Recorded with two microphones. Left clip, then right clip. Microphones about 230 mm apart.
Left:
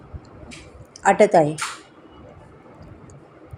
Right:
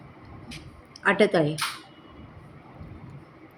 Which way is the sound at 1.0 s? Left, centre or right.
Centre.